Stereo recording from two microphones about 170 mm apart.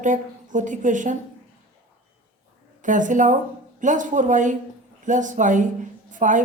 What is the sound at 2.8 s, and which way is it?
A woman's voice, 50° right (ahead or behind).